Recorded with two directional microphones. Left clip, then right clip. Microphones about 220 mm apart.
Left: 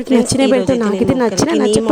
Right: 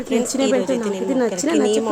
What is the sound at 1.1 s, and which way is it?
Speech, 40° left (ahead or behind).